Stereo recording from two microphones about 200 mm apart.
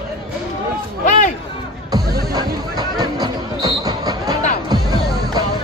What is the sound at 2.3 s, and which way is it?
Music, 20° right (ahead or behind).